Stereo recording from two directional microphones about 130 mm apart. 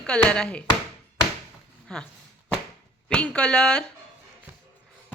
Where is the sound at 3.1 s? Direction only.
10° left (ahead or behind).